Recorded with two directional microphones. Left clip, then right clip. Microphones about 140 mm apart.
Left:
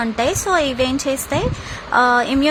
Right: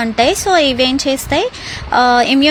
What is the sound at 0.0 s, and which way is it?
A woman's voice, 15° right (ahead or behind).